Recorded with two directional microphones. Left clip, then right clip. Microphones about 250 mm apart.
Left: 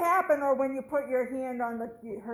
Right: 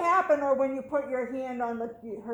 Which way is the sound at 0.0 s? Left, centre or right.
Left.